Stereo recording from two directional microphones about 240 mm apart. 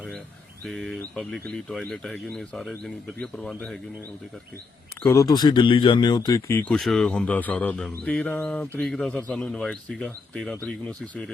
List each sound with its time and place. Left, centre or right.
0.6 s speech: centre
5.0 s speech: centre